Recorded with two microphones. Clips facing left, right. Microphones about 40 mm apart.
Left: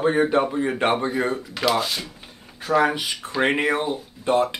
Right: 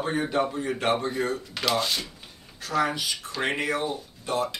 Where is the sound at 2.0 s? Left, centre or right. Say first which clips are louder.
Left 4 dB; left.